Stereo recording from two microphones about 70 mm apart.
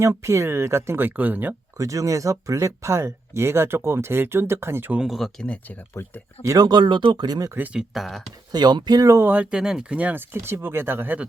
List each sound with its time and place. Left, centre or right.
0.0 s speech: right
1.8 s speech: right
5.0 s speech: centre
6.0 s speech: left
6.6 s speech: right
7.6 s speech: centre
7.9 s speech: centre
8.5 s speech: right
9.2 s speech: right
10.0 s speech: right